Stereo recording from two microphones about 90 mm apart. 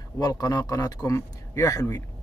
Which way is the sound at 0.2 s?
45° left (ahead or behind).